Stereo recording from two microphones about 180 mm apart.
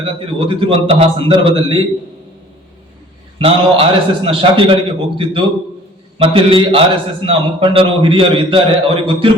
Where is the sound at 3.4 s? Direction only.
30° right (ahead or behind).